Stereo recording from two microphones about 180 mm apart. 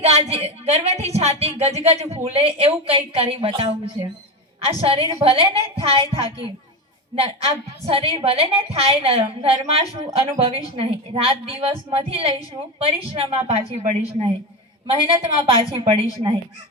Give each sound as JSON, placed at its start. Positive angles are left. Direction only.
{"t": 0.0, "sound": "a woman's voice", "side_deg": -35}
{"t": 14.8, "sound": "a woman's voice", "side_deg": -30}